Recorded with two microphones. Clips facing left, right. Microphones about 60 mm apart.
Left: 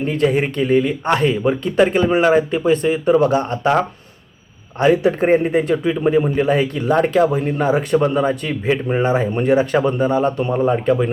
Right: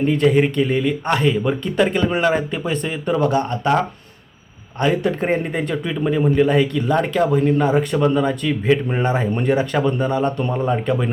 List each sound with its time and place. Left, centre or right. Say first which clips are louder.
0.0 s speech: right 2 dB; centre
4.8 s speech: left 4 dB; centre
6.7 s speech: left 2 dB; left
7.1 s speech: left 1 dB; centre
7.9 s speech: left 4 dB; left
8.6 s speech: left 2 dB; centre